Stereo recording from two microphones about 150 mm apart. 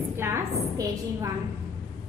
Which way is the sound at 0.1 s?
15° right (ahead or behind).